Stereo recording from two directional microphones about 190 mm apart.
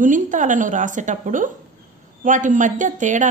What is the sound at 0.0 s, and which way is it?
A woman's voice, 45° right (ahead or behind).